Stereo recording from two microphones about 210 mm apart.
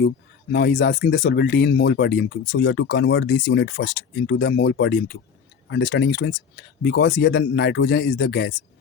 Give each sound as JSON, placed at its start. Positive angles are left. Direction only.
{"t": 0.5, "sound": "speech", "side_deg": 55}